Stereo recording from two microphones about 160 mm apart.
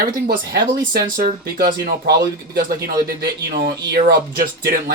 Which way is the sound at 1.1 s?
65° right (ahead or behind).